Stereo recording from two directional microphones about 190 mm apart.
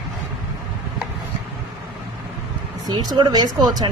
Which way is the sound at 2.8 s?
20° right (ahead or behind).